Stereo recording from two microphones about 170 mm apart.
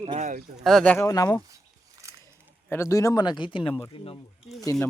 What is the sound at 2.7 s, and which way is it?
Speech, 15° left (ahead or behind).